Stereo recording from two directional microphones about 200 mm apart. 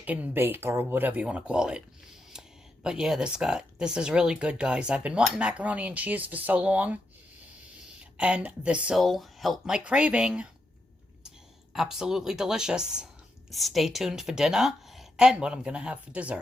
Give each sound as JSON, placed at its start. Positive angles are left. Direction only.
{"t": 0.0, "sound": "speech", "side_deg": -10}
{"t": 2.8, "sound": "speech", "side_deg": -5}
{"t": 8.2, "sound": "speech", "side_deg": -5}
{"t": 11.7, "sound": "speech", "side_deg": 0}